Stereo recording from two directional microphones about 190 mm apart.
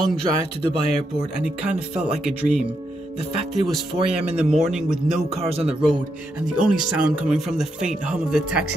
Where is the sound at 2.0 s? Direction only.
5° right (ahead or behind).